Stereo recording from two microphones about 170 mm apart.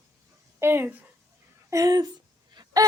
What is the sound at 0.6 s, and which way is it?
Speech, 15° right (ahead or behind).